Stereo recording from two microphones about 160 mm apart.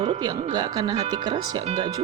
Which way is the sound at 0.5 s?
25° right (ahead or behind).